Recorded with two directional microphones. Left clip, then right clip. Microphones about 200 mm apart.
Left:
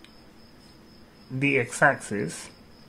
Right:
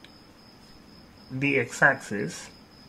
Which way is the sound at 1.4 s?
15° left (ahead or behind).